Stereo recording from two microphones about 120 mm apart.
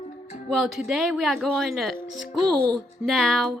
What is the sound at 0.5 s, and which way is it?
Speech, centre (ahead or behind).